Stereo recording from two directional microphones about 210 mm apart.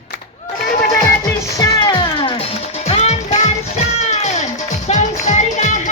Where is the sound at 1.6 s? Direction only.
20° left (ahead or behind).